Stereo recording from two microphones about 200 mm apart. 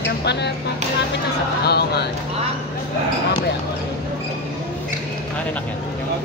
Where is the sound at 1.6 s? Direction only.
55° left (ahead or behind).